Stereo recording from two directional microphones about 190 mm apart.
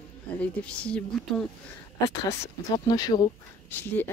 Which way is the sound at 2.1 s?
20° left (ahead or behind).